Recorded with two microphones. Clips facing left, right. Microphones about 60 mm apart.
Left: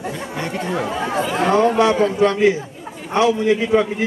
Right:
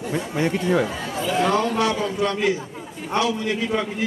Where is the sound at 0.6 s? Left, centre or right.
Left.